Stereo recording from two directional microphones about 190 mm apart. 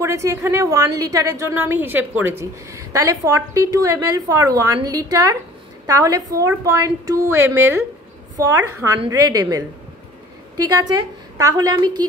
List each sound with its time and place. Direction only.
0.0 s a woman's voice: 15° right (ahead or behind)